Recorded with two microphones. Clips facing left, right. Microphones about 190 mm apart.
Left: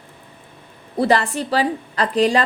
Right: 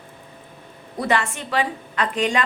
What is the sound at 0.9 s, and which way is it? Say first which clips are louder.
A woman's voice: left 5 dB; 35° left (ahead or behind).